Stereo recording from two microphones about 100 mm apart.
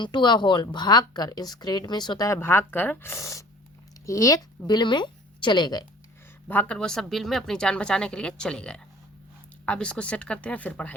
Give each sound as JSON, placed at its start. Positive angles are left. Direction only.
{"t": 0.0, "sound": "a woman's voice", "side_deg": 50}
{"t": 4.6, "sound": "speech", "side_deg": 50}
{"t": 6.5, "sound": "speech", "side_deg": 15}